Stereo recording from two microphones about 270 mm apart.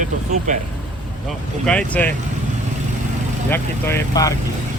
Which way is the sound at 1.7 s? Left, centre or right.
Centre.